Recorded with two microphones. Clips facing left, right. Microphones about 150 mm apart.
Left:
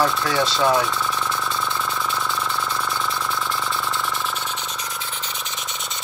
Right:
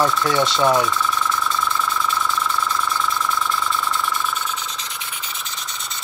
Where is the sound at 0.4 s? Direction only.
20° right (ahead or behind).